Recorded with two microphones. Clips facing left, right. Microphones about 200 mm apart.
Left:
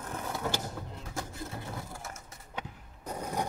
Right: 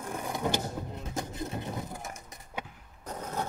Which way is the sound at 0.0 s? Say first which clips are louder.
Right 3 dB; 15° right (ahead or behind).